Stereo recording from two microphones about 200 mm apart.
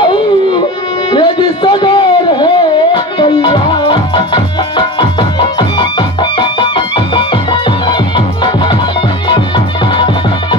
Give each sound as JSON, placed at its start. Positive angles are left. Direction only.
{"t": 0.0, "sound": "music", "side_deg": 25}